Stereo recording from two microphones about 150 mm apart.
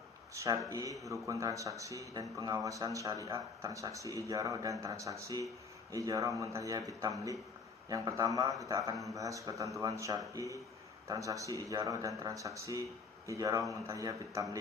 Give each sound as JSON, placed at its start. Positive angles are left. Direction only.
{"t": 0.3, "sound": "a man's voice", "side_deg": -20}